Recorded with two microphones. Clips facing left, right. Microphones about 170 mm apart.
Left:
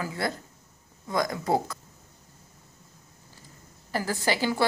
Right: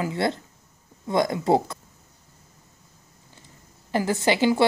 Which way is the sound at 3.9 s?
25° right (ahead or behind).